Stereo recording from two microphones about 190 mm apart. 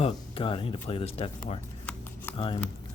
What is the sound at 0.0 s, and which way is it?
Speech, 30° left (ahead or behind).